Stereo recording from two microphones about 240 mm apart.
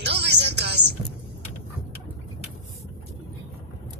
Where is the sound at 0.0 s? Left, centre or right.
Right.